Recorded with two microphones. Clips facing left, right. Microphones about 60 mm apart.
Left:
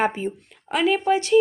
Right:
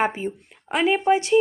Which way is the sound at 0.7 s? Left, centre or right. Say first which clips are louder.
Right 1 dB; centre.